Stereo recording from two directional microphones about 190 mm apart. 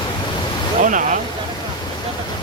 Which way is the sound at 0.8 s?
45° right (ahead or behind).